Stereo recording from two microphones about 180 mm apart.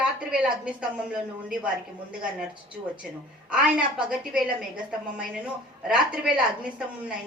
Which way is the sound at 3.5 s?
5° right (ahead or behind).